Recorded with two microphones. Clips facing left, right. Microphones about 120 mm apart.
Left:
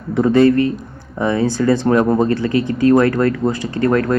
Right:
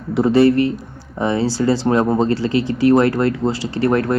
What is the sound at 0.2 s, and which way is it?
Speech, 30° right (ahead or behind).